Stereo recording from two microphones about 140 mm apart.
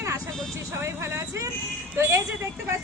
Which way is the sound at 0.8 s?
20° right (ahead or behind).